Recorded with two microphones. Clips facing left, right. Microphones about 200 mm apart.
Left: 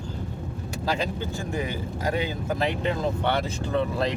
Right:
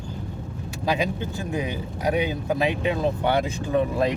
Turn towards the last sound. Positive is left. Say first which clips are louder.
# right 3 dB
turn(degrees=-15)  # may be behind; listen again after turning